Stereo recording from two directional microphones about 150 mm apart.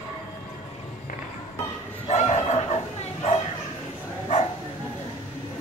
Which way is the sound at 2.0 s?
45° left (ahead or behind).